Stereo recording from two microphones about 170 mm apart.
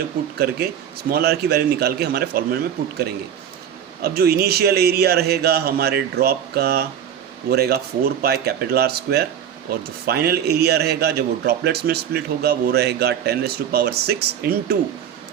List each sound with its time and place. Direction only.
0.3 s a man's voice: 65° right (ahead or behind)
4.0 s a man's voice: 70° right (ahead or behind)